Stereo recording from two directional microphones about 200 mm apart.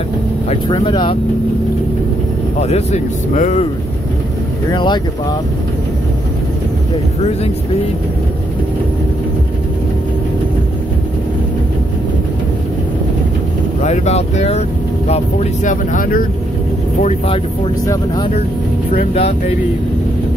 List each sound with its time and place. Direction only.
0.5 s speech: 25° left (ahead or behind)
2.6 s speech: 35° left (ahead or behind)
4.6 s speech: 20° left (ahead or behind)
7.2 s speech: 30° left (ahead or behind)
13.7 s speech: 35° left (ahead or behind)
17.0 s speech: 35° left (ahead or behind)
17.8 s speech: 20° left (ahead or behind)
18.9 s speech: 30° left (ahead or behind)